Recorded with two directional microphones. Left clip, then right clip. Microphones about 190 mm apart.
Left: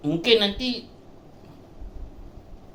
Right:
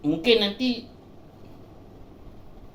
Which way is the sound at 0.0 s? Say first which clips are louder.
Left 1 dB; 45° left (ahead or behind).